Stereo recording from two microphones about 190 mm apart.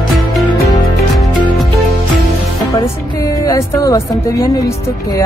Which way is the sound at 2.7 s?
20° left (ahead or behind).